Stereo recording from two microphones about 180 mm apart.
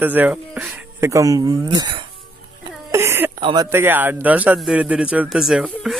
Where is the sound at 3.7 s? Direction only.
10° right (ahead or behind).